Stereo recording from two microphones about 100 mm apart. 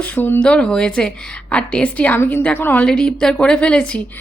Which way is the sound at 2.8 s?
5° left (ahead or behind).